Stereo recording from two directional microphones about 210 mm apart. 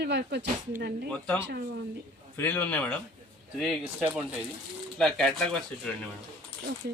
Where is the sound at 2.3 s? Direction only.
10° left (ahead or behind).